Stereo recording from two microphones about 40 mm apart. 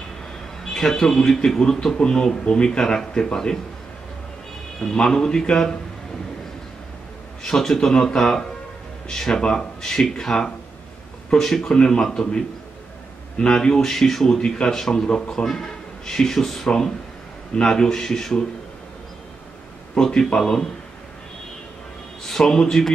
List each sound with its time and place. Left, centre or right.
0.7 s a man's voice: centre
4.9 s a man's voice: centre
7.4 s a man's voice: centre
20.0 s a man's voice: centre
22.3 s a man's voice: centre